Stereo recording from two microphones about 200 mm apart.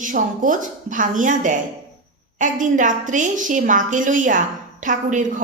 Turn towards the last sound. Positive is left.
turn(degrees=-40)  # may be behind; listen again after turning